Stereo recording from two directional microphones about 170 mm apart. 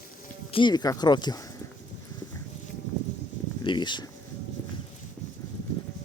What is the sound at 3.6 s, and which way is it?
Speech, 25° left (ahead or behind).